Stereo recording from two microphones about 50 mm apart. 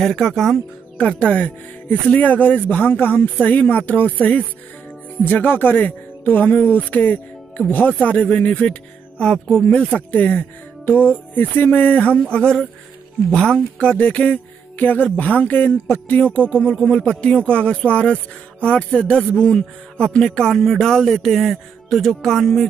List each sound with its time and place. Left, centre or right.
0.0 s speech: centre
0.9 s speech: left
9.7 s speech: centre
9.9 s speech: left
16.3 s speech: left; by 22.7 s centre